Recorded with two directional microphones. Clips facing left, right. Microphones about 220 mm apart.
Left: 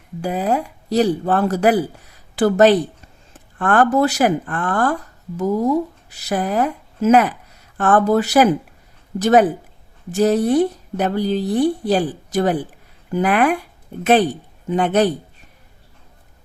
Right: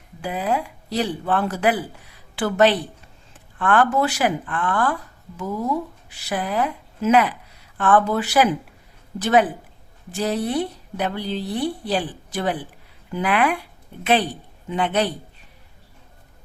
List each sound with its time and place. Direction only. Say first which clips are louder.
0.2 s speech: left 4 dB; 45° left (ahead or behind)
6.1 s a woman's voice: left 5 dB; 40° left (ahead or behind)